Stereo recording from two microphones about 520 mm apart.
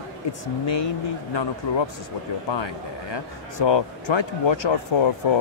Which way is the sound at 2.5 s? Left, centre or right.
Left.